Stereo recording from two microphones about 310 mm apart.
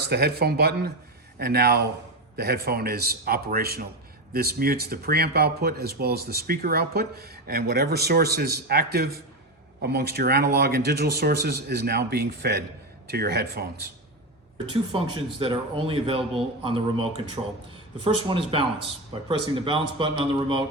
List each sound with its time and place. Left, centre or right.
0.0 s speech: right
14.7 s speech: centre